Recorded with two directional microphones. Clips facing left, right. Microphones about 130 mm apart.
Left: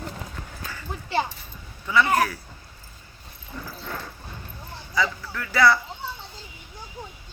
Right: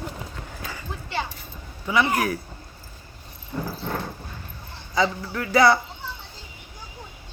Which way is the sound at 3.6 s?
35° right (ahead or behind).